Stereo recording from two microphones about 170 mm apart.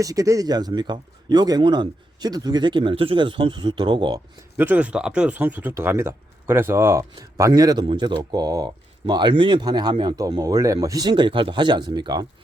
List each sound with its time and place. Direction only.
0.0 s speech: 20° right (ahead or behind)
4.5 s speech: 10° right (ahead or behind)